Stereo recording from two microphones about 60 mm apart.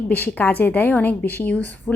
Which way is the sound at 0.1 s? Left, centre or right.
Left.